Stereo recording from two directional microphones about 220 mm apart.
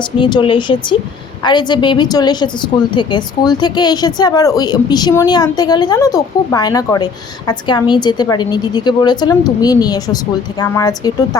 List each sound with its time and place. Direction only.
0.0 s a woman's voice: 20° left (ahead or behind)